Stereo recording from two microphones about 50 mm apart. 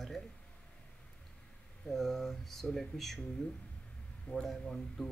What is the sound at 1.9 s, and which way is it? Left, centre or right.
Speech, centre.